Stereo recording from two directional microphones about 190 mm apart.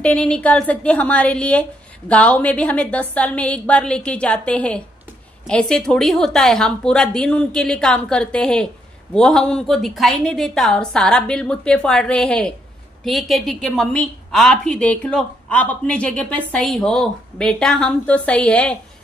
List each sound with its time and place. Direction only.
0.0 s a woman's voice: 5° left (ahead or behind)